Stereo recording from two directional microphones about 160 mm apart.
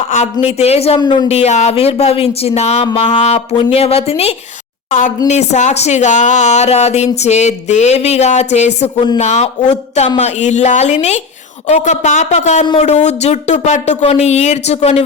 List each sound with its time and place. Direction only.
0.1 s speech: 45° left (ahead or behind)
0.9 s speech: 25° left (ahead or behind)
1.3 s speech: 40° left (ahead or behind)
4.9 s speech: 50° left (ahead or behind)